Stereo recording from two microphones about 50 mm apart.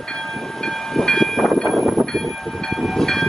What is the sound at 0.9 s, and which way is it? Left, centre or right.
Train, centre.